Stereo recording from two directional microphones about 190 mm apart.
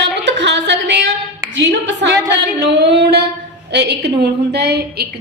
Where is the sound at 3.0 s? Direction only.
55° right (ahead or behind).